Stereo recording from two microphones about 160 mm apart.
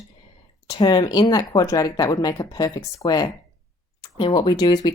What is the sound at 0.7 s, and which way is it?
Speech, 25° left (ahead or behind).